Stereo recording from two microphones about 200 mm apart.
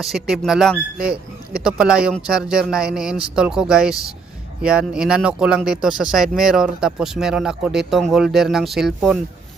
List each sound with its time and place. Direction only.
0.0 s speech: centre (ahead or behind)